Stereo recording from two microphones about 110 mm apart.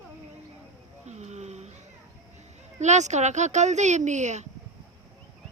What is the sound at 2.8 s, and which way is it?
A woman's voice, 90° right.